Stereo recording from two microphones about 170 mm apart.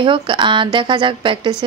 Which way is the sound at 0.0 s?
30° right (ahead or behind).